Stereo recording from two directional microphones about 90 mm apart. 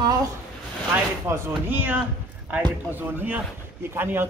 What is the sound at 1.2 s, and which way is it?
Speech, 30° right (ahead or behind).